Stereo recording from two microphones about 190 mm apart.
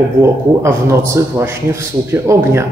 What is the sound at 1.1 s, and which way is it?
Speech, 15° right (ahead or behind).